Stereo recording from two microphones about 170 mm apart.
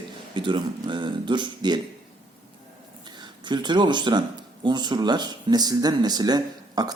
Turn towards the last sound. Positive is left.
turn(degrees=-25)  # may be behind; listen again after turning